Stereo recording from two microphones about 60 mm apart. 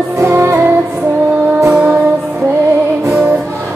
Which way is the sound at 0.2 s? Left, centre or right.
Right.